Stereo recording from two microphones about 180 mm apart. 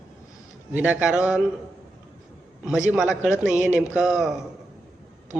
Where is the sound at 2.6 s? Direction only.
5° right (ahead or behind).